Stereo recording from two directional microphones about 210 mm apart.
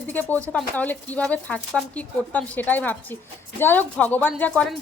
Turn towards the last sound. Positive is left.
turn(degrees=5)  # may be behind; listen again after turning